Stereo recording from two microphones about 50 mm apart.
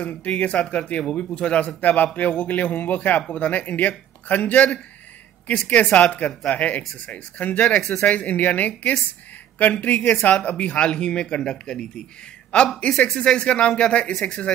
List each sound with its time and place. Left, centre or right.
0.0 s speech: left
7.8 s speech: centre
8.1 s speech: left